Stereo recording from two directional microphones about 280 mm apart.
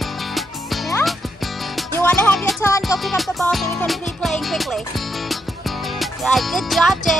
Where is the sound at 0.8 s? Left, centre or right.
Centre.